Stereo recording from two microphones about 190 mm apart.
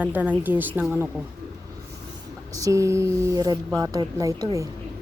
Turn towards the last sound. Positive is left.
turn(degrees=-15)  # may be behind; listen again after turning